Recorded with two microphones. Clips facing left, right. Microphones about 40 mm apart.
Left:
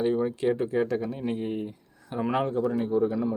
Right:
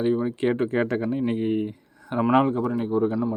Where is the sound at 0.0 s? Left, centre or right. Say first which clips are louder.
Right 2 dB; centre.